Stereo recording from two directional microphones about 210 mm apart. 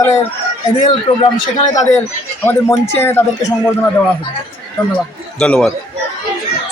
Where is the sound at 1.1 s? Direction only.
25° left (ahead or behind).